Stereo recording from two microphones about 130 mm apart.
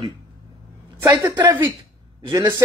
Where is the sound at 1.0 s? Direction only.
25° right (ahead or behind).